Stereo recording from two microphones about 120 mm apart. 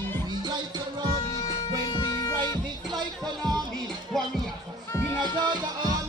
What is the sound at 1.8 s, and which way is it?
Music, 35° left (ahead or behind).